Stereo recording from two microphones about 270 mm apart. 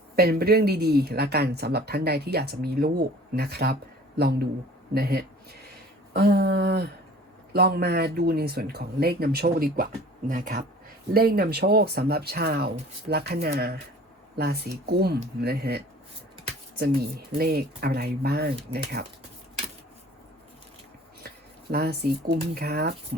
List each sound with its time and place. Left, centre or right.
0.2 s speech: right
17.3 s speech: right
21.2 s a sound: right
22.5 s speech: right